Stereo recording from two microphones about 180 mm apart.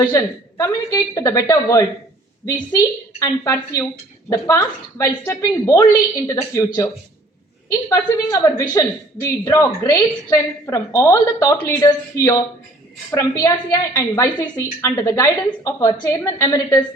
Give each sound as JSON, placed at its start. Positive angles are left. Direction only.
{"t": 0.0, "sound": "a woman's voice", "side_deg": 20}